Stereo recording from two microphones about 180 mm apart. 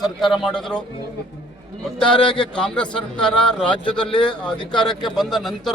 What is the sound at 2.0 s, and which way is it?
Speech, 5° left (ahead or behind).